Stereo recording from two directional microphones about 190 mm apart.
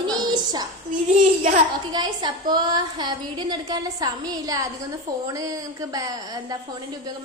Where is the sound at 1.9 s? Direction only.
20° right (ahead or behind).